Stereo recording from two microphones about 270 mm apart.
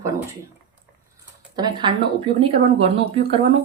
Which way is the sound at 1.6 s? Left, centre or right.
Centre.